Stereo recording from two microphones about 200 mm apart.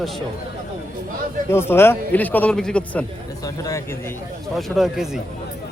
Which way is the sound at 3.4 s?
15° left (ahead or behind).